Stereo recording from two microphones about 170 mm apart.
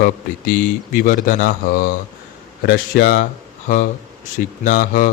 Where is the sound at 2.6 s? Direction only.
60° left (ahead or behind).